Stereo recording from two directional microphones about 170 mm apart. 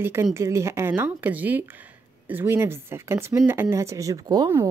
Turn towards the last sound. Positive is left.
turn(degrees=-25)  # may be behind; listen again after turning